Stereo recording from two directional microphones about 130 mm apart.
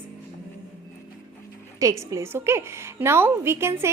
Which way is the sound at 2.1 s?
20° right (ahead or behind).